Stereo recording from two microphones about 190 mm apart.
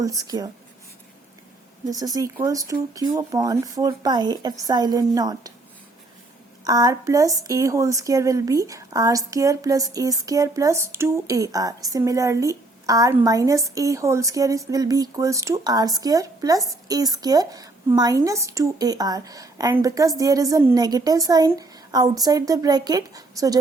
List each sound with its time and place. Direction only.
0.0 s speech: 20° right (ahead or behind)
2.1 s speech: 20° right (ahead or behind)
6.7 s a woman's voice: 20° right (ahead or behind)